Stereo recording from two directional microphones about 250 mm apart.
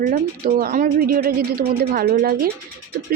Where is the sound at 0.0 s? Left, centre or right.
Right.